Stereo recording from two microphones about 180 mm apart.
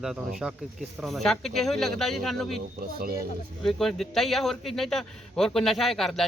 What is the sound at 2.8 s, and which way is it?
Speech, 55° right (ahead or behind).